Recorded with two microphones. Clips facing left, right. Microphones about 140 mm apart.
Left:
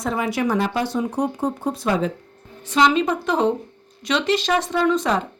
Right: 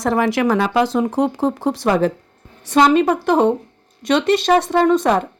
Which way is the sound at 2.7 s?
55° right (ahead or behind).